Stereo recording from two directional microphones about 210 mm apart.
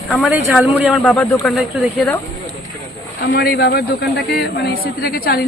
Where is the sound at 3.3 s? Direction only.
50° left (ahead or behind).